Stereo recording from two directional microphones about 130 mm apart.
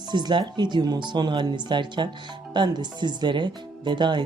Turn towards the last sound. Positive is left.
turn(degrees=-35)  # may be behind; listen again after turning